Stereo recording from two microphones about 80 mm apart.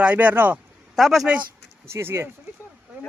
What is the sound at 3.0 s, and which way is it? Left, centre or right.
Speech, right.